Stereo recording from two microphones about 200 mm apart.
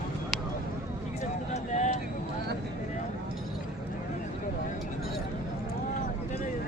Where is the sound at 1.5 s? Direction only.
35° left (ahead or behind).